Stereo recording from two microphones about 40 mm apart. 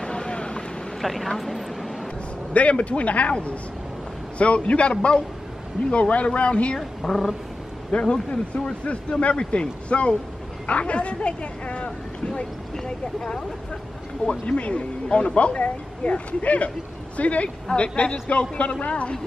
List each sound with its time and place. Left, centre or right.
0.0 s vehicle: left
1.0 s speech: centre
2.5 s speech: left
4.4 s speech: left
6.8 s a woman's voice: centre
7.9 s speech: left
12.8 s speech: centre
14.4 s speech: left